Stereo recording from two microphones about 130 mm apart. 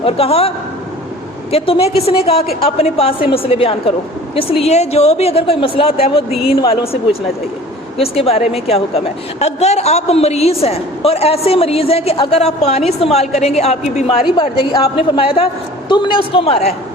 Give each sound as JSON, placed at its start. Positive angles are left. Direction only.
{"t": 0.0, "sound": "a woman's voice", "side_deg": 50}
{"t": 14.3, "sound": "a woman's voice", "side_deg": 40}